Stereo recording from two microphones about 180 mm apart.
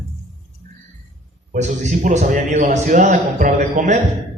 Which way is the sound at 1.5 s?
45° right (ahead or behind).